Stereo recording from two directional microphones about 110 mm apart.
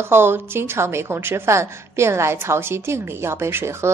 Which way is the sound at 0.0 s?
20° right (ahead or behind).